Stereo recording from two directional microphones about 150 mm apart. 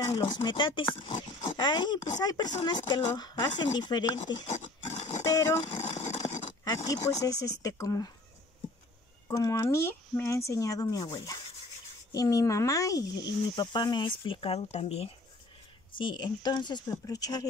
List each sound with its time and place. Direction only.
0.0 s speech: 25° left (ahead or behind)
4.5 s pig: 50° left (ahead or behind)
5.2 s speech: 20° left (ahead or behind)
5.7 s a sound: 45° left (ahead or behind)
6.2 s horse: 40° left (ahead or behind)
6.6 s speech: 25° left (ahead or behind)
9.3 s speech: 20° left (ahead or behind); by 15.0 s 45° left (ahead or behind)
16.0 s speech: 30° left (ahead or behind)